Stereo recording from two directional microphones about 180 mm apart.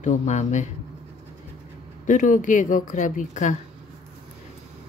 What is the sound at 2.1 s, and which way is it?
Speech, 45° left (ahead or behind).